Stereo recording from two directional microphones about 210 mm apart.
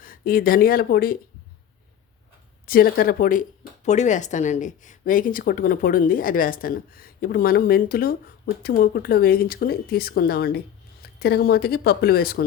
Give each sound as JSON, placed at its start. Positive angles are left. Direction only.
{"t": 0.0, "sound": "speech", "side_deg": 45}
{"t": 2.6, "sound": "speech", "side_deg": 45}